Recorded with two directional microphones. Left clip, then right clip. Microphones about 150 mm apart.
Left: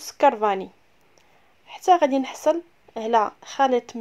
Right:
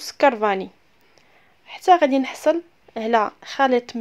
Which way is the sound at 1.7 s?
20° right (ahead or behind).